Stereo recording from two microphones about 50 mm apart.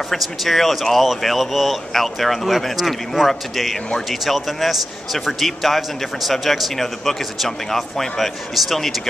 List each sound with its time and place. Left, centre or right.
0.1 s speech: centre